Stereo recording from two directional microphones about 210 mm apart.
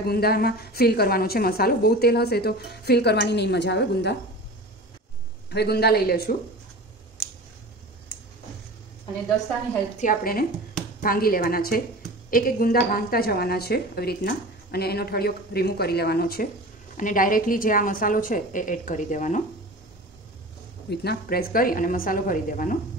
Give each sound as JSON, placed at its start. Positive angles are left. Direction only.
{"t": 0.0, "sound": "a woman's voice", "side_deg": 50}
{"t": 5.5, "sound": "a woman's voice", "side_deg": 50}
{"t": 9.9, "sound": "a woman's voice", "side_deg": 40}
{"t": 20.9, "sound": "a woman's voice", "side_deg": 50}